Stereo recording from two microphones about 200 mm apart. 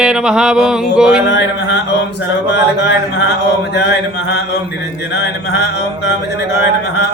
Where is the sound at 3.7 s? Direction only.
55° left (ahead or behind).